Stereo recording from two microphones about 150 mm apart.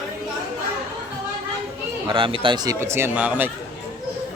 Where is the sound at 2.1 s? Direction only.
35° right (ahead or behind).